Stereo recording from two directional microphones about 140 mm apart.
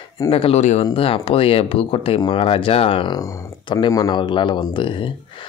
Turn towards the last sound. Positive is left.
turn(degrees=35)  # may be behind; listen again after turning